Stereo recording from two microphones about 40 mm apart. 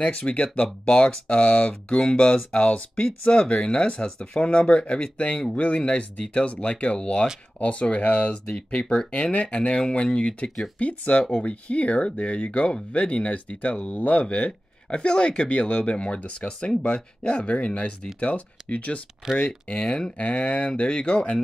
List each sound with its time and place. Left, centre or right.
0.1 s speech: left
0.8 s speech: centre; by 14.2 s left
14.2 s speech: left
19.3 s speech: left